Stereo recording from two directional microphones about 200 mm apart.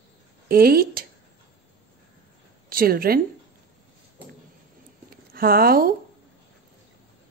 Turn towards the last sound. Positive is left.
turn(degrees=-50)  # may be behind; listen again after turning